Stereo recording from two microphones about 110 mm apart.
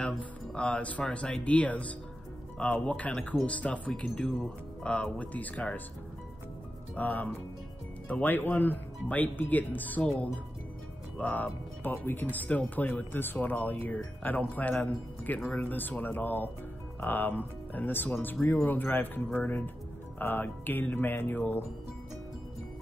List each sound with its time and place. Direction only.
0.0 s speech: 10° left (ahead or behind)
7.0 s speech: 15° left (ahead or behind)